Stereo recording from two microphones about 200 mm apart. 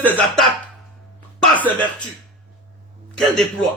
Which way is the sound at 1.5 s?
25° right (ahead or behind).